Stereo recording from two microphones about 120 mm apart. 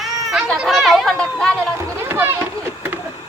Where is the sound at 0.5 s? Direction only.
Centre (ahead or behind).